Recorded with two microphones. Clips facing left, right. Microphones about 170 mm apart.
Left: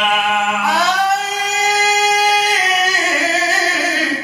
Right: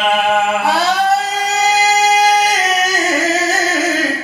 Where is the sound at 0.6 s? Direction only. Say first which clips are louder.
Right 2 dB; 30° right (ahead or behind).